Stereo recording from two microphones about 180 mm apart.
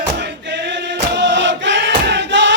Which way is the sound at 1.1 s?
80° right.